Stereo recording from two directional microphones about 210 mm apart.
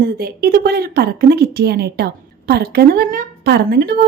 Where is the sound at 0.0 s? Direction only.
45° right (ahead or behind).